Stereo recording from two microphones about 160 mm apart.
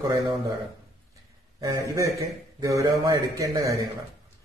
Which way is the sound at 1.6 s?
20° right (ahead or behind).